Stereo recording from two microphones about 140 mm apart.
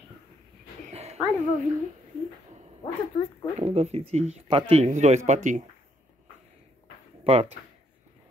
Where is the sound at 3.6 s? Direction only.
45° right (ahead or behind).